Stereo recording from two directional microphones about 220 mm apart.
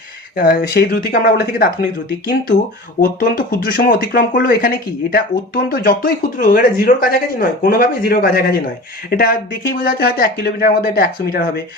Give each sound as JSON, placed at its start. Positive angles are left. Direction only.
{"t": 0.3, "sound": "speech", "side_deg": 40}
{"t": 3.0, "sound": "speech", "side_deg": 40}